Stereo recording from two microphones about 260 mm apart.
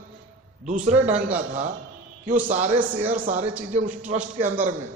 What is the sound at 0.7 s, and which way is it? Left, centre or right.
Speech, right.